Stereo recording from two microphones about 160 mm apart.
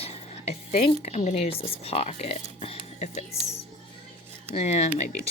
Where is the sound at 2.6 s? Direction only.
45° left (ahead or behind).